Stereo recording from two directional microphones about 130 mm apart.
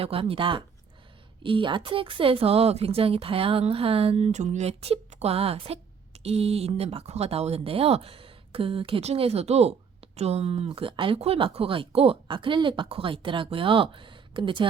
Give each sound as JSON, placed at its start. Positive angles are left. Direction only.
{"t": 0.0, "sound": "speech", "side_deg": -45}